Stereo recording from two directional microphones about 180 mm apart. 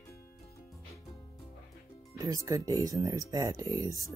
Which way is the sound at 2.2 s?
20° right (ahead or behind).